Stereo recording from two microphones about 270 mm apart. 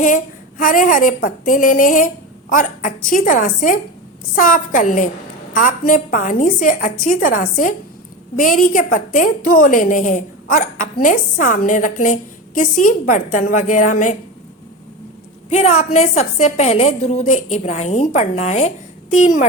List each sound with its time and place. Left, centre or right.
0.6 s a woman's voice: left
15.4 s a woman's voice: left